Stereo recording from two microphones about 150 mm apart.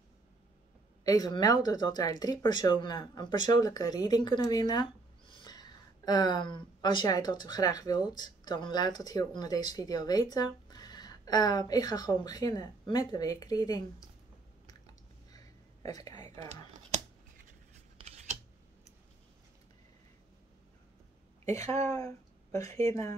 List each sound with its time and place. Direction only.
1.0 s speech: 25° left (ahead or behind)
15.3 s a sound: 25° left (ahead or behind)
21.5 s speech: 20° left (ahead or behind)
22.8 s speech: 25° left (ahead or behind)